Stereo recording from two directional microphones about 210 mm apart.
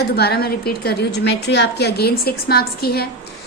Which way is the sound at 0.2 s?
50° left (ahead or behind).